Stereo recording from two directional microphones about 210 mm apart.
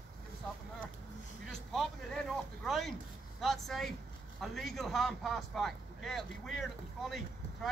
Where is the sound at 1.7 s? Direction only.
Centre (ahead or behind).